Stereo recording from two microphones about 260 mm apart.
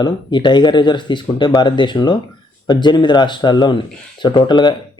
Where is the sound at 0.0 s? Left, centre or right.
Centre.